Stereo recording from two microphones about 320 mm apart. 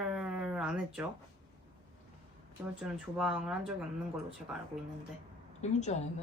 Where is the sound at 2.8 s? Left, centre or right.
Centre.